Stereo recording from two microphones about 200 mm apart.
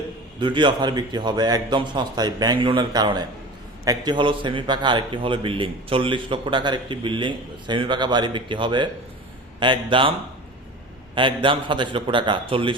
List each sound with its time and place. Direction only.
0.3 s a man's voice: 25° right (ahead or behind)
11.1 s a man's voice: 25° right (ahead or behind)